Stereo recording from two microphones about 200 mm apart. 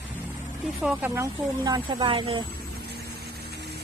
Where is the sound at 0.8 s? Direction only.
5° right (ahead or behind); by 2.4 s 25° right (ahead or behind).